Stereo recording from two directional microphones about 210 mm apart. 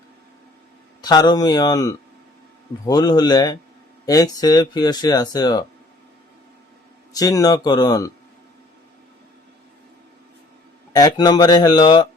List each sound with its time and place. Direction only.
1.0 s speech: 20° left (ahead or behind)
7.1 s speech: 15° left (ahead or behind)
10.9 s speech: 20° left (ahead or behind)